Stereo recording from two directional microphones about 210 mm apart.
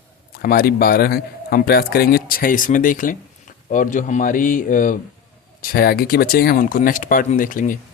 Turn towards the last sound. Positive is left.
turn(degrees=40)  # may be behind; listen again after turning